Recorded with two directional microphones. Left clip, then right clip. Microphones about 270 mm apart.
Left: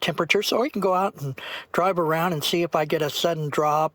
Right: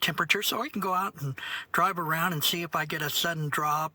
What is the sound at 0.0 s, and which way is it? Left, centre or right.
Speech, centre.